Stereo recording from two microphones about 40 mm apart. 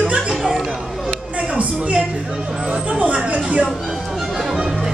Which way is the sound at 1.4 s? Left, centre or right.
Right.